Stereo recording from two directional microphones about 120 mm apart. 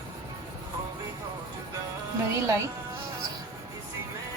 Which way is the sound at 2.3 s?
25° right (ahead or behind).